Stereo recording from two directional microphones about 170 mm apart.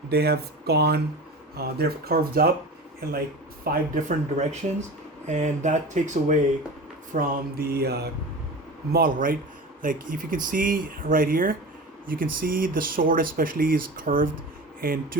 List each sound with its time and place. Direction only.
0.1 s mantra: 70° right (ahead or behind)
1.5 s speech: 65° right (ahead or behind)
3.6 s speech: 50° right (ahead or behind)
7.1 s mantra: 60° right (ahead or behind)
8.9 s speech: 55° right (ahead or behind)